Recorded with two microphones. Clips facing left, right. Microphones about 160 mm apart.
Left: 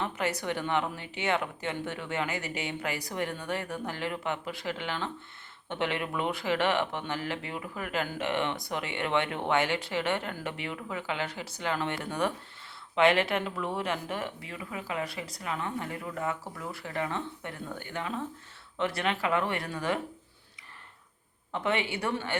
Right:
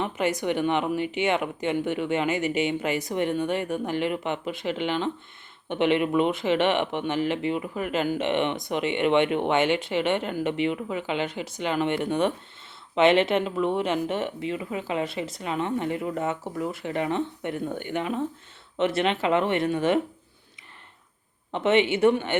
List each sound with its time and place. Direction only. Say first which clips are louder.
0.0 s speech: right 6 dB; 20° right (ahead or behind)
21.5 s speech: right 9 dB; 20° right (ahead or behind)